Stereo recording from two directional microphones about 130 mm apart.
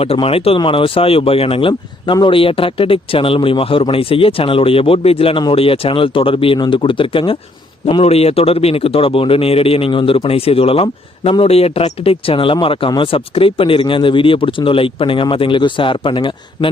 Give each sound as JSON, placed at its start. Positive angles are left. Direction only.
{"t": 0.0, "sound": "a man's voice", "side_deg": 50}